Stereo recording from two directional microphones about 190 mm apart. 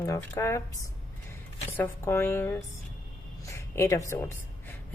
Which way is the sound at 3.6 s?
15° left (ahead or behind).